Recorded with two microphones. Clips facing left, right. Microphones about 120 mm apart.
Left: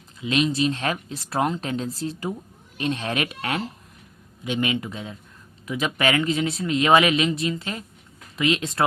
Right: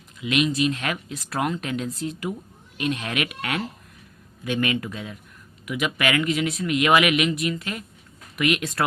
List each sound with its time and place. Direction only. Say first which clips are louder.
0.2 s speech: even; 30° left (ahead or behind)